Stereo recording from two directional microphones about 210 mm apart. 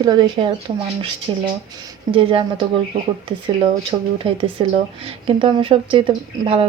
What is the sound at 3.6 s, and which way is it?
Speech, 25° right (ahead or behind).